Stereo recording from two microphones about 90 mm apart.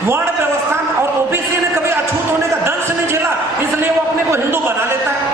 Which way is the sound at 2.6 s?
30° right (ahead or behind).